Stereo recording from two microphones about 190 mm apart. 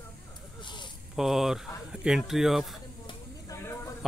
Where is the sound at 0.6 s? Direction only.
25° left (ahead or behind).